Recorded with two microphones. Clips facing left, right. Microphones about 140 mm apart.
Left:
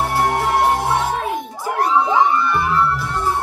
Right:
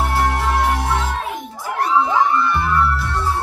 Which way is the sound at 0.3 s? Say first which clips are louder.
Left 2 dB; 50° left (ahead or behind).